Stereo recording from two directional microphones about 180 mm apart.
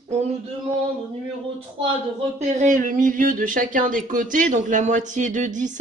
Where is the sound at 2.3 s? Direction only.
45° right (ahead or behind).